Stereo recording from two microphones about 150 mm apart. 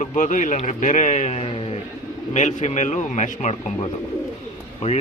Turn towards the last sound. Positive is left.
turn(degrees=45)  # may be behind; listen again after turning